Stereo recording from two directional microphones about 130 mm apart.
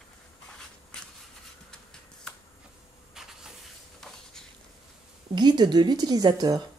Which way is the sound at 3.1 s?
5° right (ahead or behind).